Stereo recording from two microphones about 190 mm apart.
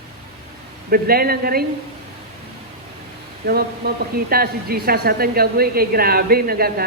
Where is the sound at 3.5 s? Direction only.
55° right (ahead or behind).